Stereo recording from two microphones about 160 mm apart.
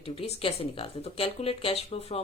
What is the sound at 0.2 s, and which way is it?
Speech, 40° left (ahead or behind).